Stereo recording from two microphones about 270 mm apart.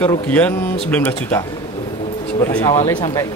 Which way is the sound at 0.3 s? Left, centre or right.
Centre.